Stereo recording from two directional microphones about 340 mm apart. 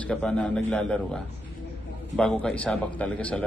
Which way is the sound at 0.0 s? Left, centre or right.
Centre.